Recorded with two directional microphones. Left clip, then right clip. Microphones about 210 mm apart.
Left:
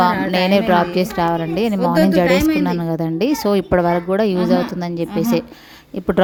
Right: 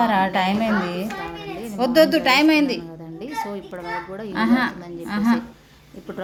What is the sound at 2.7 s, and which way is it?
A woman's voice, 50° left (ahead or behind).